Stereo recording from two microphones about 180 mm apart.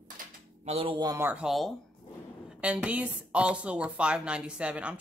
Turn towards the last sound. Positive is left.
turn(degrees=-5)  # may be behind; listen again after turning